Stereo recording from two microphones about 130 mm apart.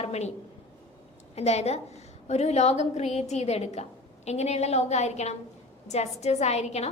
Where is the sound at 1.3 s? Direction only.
55° left (ahead or behind).